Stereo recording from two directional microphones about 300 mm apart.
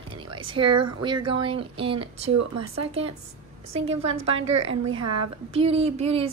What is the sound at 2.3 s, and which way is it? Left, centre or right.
Speech, right.